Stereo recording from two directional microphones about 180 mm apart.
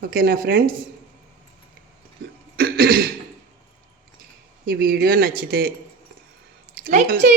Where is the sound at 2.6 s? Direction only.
55° right (ahead or behind).